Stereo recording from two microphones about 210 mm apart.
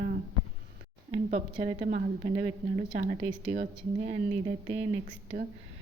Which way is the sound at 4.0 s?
25° right (ahead or behind).